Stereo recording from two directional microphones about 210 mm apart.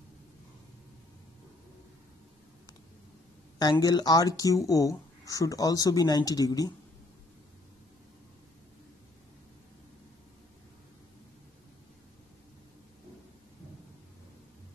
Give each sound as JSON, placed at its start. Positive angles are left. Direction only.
{"t": 3.5, "sound": "speech", "side_deg": 20}